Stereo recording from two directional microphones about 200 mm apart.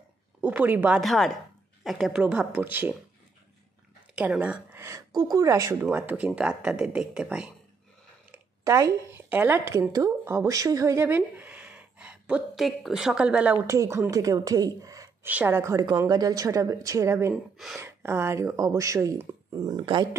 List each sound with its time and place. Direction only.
0.4 s speech: 10° right (ahead or behind)
4.1 s speech: 5° right (ahead or behind)
8.3 s speech: 15° right (ahead or behind)
17.6 s speech: centre (ahead or behind)
17.8 s speech: 10° right (ahead or behind)